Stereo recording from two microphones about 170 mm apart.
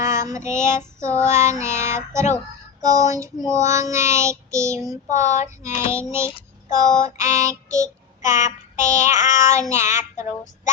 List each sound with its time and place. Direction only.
0.0 s child singing: 15° right (ahead or behind)
5.0 s child singing: 45° left (ahead or behind)
5.6 s child singing: 15° right (ahead or behind)
8.4 s child singing: 45° left (ahead or behind)
9.3 s child singing: 15° right (ahead or behind)